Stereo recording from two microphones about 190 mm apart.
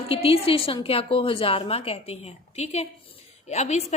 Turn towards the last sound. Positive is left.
turn(degrees=35)  # may be behind; listen again after turning